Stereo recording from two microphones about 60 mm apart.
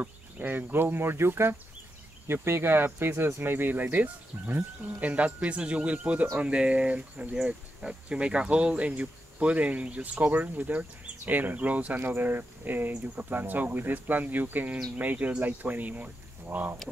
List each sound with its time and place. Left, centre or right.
0.0 s speech: right
4.8 s speech: right